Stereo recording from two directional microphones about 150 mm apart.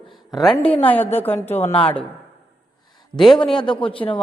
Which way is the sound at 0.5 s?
40° left (ahead or behind).